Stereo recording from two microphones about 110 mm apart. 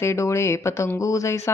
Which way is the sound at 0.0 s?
25° left (ahead or behind).